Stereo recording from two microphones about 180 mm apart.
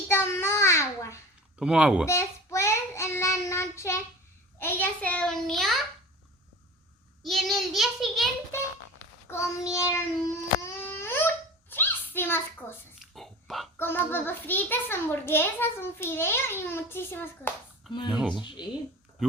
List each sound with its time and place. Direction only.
0.1 s child singing: 15° left (ahead or behind)
1.5 s speech: 5° right (ahead or behind)
2.0 s child singing: 15° left (ahead or behind)
4.6 s a sound: 10° left (ahead or behind)
7.2 s child singing: centre (ahead or behind)
9.2 s child singing: 15° left (ahead or behind)
10.6 s a sound: 15° left (ahead or behind)
13.1 s dog: centre (ahead or behind)
13.7 s a child's voice: 10° left (ahead or behind)
18.1 s speech: 5° right (ahead or behind)
18.4 s speech: 25° left (ahead or behind)